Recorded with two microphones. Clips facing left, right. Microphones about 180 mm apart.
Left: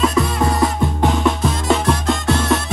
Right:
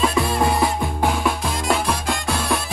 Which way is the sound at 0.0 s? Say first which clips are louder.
Left 2 dB; centre (ahead or behind).